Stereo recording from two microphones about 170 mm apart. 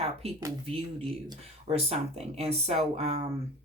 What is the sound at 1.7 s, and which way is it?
Speech, 40° right (ahead or behind).